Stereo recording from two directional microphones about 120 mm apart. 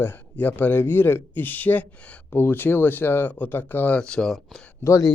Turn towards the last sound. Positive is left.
turn(degrees=25)  # may be behind; listen again after turning